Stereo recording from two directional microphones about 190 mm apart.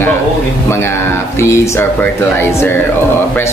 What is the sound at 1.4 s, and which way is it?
A man's voice, 15° left (ahead or behind).